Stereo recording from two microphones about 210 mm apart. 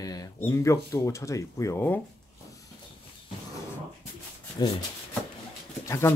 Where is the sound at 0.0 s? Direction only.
15° left (ahead or behind).